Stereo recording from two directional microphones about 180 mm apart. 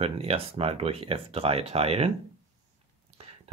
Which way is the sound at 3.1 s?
35° right (ahead or behind).